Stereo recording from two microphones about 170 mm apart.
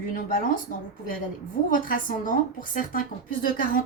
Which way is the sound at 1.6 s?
55° left (ahead or behind).